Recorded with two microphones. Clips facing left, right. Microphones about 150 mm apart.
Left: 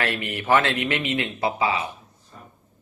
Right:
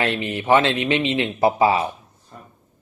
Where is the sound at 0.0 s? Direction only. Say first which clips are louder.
Right 4 dB; 20° right (ahead or behind).